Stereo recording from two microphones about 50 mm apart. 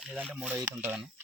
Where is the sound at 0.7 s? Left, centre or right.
Right.